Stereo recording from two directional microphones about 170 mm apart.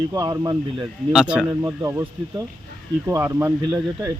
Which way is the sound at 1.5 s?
20° right (ahead or behind).